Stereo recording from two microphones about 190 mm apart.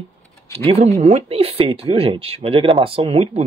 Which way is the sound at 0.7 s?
35° right (ahead or behind).